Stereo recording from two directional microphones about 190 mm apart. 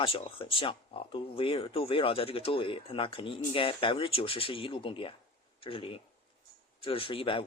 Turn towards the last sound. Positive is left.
turn(degrees=30)  # may be behind; listen again after turning